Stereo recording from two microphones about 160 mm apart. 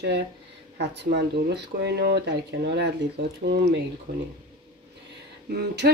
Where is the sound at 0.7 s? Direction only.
90° right.